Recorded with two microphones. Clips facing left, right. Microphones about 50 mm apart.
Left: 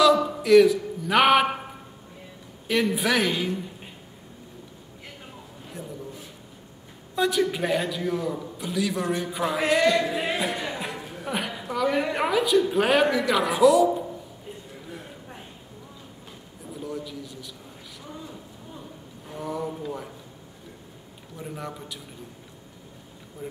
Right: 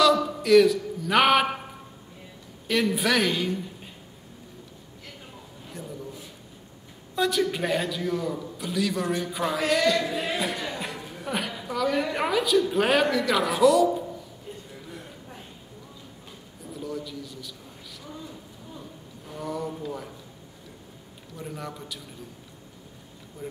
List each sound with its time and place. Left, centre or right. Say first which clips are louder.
0.0 s a man's voice: left 2 dB; centre
2.7 s a man's voice: even; centre
5.7 s a sound: left 1 dB; centre
7.2 s a man's voice: left 1 dB; centre
16.7 s a man's voice: even; centre
18.0 s a sound: left 1 dB; centre
21.4 s a man's voice: left 1 dB; centre
23.4 s speech: even; centre